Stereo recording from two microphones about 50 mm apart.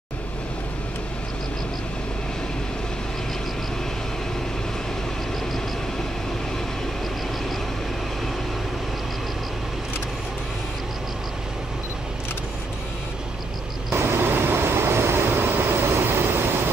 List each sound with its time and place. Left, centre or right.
13.9 s vehicle: right